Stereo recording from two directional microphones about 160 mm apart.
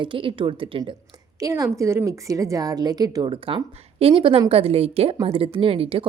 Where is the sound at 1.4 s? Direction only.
20° right (ahead or behind); by 6.1 s 35° right (ahead or behind).